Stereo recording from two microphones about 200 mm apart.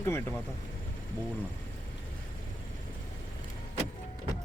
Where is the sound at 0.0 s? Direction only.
10° left (ahead or behind).